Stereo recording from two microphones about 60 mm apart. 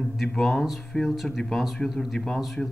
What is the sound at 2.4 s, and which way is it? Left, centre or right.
Speech, centre.